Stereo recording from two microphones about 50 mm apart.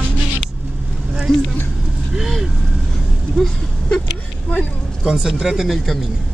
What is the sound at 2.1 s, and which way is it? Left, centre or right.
Speech, centre.